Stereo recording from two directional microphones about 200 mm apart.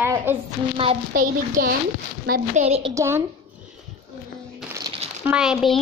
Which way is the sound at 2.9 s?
15° right (ahead or behind).